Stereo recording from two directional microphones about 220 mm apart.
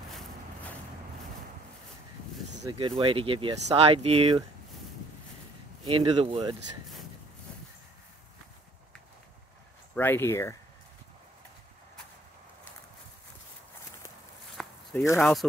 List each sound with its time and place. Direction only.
2.6 s speech: 20° right (ahead or behind)
5.9 s speech: 25° right (ahead or behind)
9.9 s speech: 10° left (ahead or behind)
14.6 s a sound: centre (ahead or behind)
15.1 s speech: centre (ahead or behind)